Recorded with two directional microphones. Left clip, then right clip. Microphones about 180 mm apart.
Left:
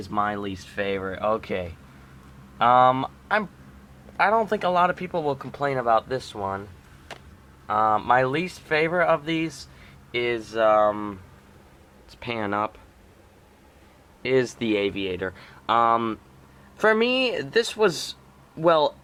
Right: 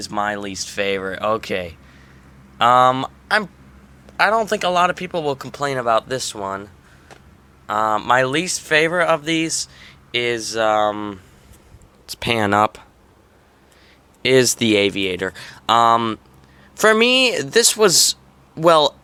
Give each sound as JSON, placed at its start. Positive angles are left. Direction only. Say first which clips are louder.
{"t": 0.0, "sound": "speech", "louder": "right 3 dB", "side_deg": -20}
{"t": 7.7, "sound": "speech", "louder": "right 3 dB", "side_deg": -25}
{"t": 12.0, "sound": "speech", "louder": "right 10 dB", "side_deg": -40}
{"t": 14.2, "sound": "speech", "louder": "right 8 dB", "side_deg": -30}